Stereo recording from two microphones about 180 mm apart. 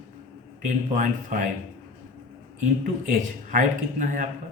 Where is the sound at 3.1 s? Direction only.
45° right (ahead or behind).